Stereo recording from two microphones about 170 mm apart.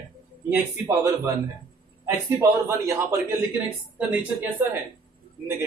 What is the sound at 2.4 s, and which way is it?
Speech, 15° right (ahead or behind).